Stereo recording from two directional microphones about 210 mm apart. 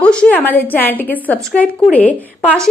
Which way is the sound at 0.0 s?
5° left (ahead or behind).